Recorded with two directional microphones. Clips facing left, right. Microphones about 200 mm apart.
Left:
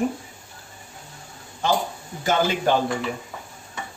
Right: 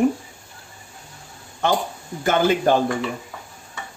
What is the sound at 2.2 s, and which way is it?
Speech, 55° right (ahead or behind).